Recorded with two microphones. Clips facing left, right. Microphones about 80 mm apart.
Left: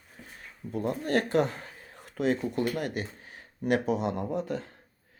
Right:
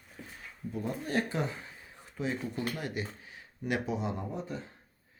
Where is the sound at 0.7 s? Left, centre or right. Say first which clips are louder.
Left 5 dB; left.